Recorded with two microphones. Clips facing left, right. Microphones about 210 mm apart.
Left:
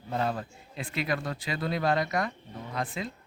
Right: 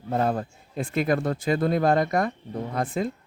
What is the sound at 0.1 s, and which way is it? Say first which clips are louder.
Speech: right 6 dB; 45° right (ahead or behind).